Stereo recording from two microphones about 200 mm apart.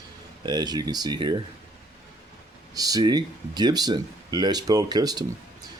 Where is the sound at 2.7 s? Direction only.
20° right (ahead or behind).